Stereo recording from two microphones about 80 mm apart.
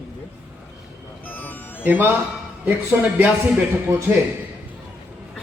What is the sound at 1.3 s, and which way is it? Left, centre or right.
Music, left.